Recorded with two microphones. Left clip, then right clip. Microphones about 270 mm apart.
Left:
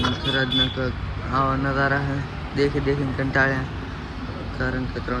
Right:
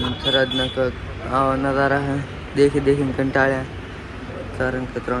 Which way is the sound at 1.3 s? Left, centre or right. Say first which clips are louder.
Right 3 dB; right.